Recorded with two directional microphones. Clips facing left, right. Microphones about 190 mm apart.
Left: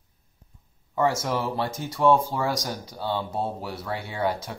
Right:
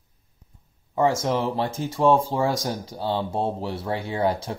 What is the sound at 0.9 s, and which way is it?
Speech, 25° right (ahead or behind).